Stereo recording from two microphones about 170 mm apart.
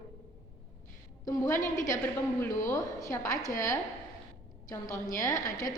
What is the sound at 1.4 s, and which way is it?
A woman's voice, 15° left (ahead or behind).